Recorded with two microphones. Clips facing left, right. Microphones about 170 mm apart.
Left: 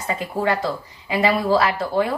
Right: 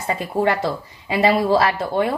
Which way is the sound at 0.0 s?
25° right (ahead or behind).